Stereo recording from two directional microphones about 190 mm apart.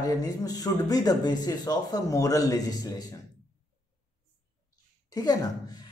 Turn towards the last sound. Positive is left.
turn(degrees=20)  # may be behind; listen again after turning